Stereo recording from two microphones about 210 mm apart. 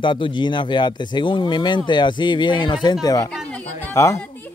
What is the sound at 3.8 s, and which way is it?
Speech, 15° left (ahead or behind).